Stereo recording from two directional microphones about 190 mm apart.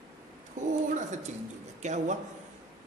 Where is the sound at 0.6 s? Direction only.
40° right (ahead or behind).